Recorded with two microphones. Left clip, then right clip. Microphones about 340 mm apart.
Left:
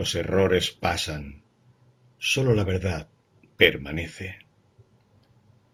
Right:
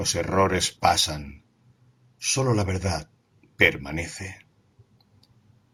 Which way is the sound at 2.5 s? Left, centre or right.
Centre.